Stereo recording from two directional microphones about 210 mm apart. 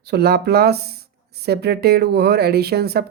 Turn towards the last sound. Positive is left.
turn(degrees=-50)  # may be behind; listen again after turning